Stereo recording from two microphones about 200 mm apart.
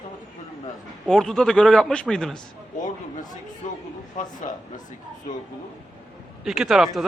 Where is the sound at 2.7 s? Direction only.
40° left (ahead or behind).